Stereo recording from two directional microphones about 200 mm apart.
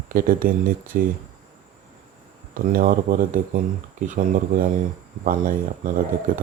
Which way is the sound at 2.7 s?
45° right (ahead or behind).